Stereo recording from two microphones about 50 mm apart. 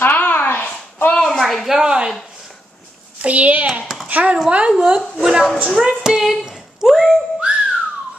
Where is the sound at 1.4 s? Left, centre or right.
Centre.